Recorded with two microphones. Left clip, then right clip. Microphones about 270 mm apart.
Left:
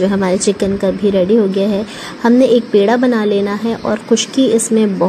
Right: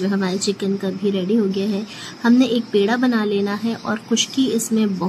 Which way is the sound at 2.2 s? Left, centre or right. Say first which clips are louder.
Left 7 dB; centre.